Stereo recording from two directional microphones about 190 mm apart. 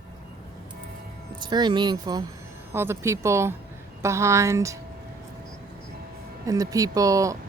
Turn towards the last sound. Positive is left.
turn(degrees=-15)  # may be behind; listen again after turning